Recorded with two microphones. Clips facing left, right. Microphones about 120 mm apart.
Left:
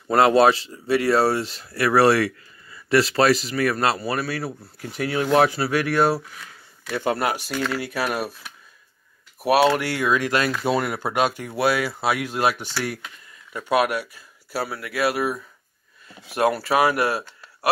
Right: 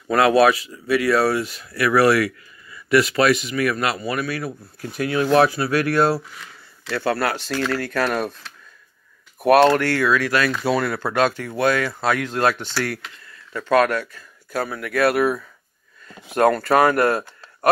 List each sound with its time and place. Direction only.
0.1 s speech: 25° left (ahead or behind)
6.9 s speech: 15° left (ahead or behind)
9.4 s speech: 5° left (ahead or behind)
16.4 s speech: 5° left (ahead or behind)